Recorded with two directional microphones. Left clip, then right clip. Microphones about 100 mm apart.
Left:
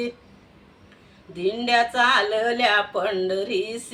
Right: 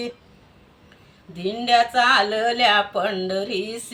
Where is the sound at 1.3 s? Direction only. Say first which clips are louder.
Right 2 dB; 30° left (ahead or behind).